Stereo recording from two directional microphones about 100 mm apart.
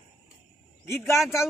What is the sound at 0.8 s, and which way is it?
Speech, 25° left (ahead or behind).